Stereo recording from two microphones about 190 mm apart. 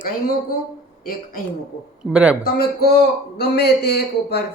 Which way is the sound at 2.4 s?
55° left (ahead or behind).